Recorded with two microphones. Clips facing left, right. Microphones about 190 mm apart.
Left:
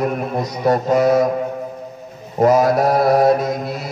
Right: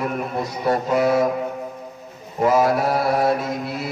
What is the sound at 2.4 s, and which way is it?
Speech, 40° left (ahead or behind).